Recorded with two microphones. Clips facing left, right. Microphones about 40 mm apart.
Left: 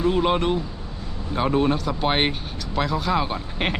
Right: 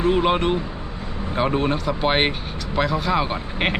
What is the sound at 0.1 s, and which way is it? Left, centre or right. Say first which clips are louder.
Speech: right 2 dB; centre.